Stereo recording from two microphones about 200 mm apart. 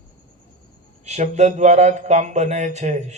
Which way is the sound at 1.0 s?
35° right (ahead or behind).